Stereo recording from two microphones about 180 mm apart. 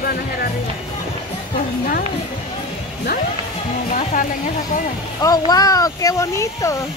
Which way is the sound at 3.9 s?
45° left (ahead or behind).